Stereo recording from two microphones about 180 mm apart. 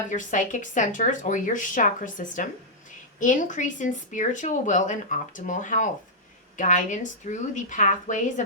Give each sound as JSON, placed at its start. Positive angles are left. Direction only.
{"t": 0.1, "sound": "speech", "side_deg": 45}